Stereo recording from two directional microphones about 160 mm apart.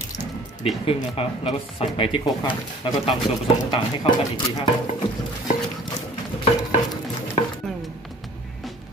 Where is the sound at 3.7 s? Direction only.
25° left (ahead or behind).